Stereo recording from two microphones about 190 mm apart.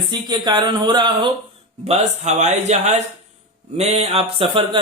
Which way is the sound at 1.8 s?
35° right (ahead or behind).